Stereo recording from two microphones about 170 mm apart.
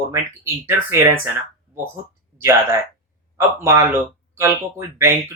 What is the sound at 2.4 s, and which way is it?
Speech, 15° right (ahead or behind).